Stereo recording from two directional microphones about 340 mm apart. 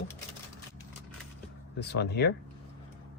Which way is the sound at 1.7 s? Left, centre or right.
Left.